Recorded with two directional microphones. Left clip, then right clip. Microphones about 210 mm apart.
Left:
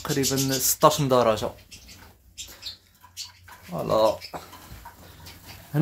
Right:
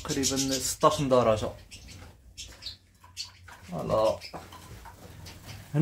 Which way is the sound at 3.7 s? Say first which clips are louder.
Left 4 dB; 30° left (ahead or behind).